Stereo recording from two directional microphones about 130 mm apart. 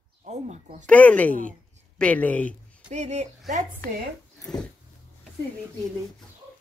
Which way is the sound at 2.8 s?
60° right (ahead or behind).